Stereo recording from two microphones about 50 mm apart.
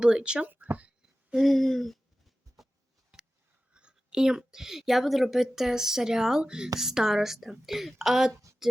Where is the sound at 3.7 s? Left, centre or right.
Centre.